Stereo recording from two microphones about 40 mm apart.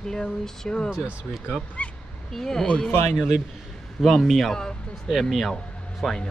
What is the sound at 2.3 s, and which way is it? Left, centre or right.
Speech, centre.